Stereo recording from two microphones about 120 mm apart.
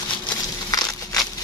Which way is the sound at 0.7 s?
30° left (ahead or behind).